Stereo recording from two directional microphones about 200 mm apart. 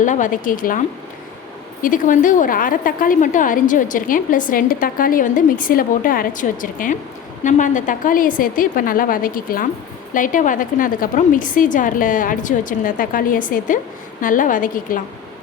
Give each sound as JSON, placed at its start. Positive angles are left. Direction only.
{"t": 0.0, "sound": "a woman's voice", "side_deg": 40}
{"t": 1.8, "sound": "a woman's voice", "side_deg": 40}